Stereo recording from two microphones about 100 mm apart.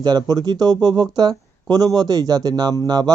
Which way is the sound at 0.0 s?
45° right (ahead or behind).